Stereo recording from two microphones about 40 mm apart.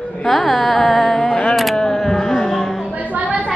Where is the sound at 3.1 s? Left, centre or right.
Right.